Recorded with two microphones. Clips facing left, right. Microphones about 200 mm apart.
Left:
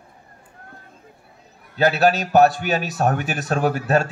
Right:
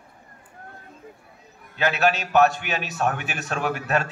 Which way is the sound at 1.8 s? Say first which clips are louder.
Left 5 dB; 35° left (ahead or behind).